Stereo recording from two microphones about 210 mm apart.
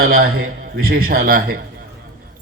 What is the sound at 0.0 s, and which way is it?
A man's voice, 45° right (ahead or behind).